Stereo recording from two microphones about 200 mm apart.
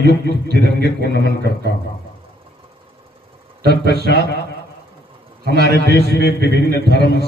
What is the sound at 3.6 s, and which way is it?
Speech, 50° right (ahead or behind).